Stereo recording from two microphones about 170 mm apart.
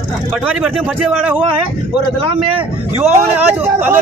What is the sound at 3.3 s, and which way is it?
Speech, 10° right (ahead or behind).